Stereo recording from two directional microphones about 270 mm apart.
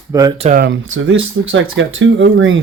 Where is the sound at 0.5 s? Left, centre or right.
Right.